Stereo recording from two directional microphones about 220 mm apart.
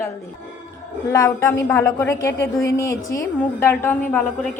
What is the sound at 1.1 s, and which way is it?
A woman's voice, 15° left (ahead or behind).